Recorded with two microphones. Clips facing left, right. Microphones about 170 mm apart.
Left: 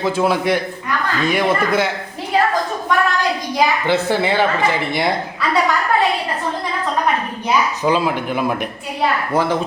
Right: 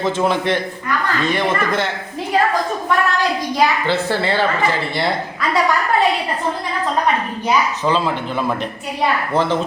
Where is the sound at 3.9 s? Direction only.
15° left (ahead or behind).